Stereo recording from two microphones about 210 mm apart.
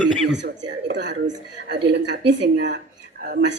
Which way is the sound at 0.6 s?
55° right (ahead or behind).